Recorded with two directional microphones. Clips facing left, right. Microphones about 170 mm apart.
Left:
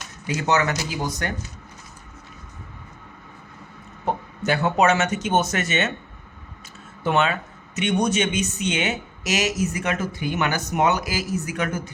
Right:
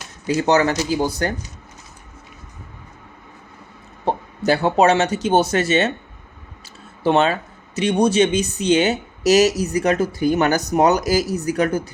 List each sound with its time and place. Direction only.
0.3 s speech: 35° right (ahead or behind)
4.0 s speech: 30° right (ahead or behind)
7.0 s speech: 35° right (ahead or behind)